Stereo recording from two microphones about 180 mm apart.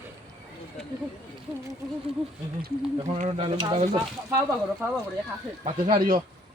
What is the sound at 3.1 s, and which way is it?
Speech, 40° right (ahead or behind).